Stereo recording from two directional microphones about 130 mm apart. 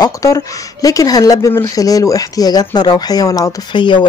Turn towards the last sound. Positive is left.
turn(degrees=40)  # may be behind; listen again after turning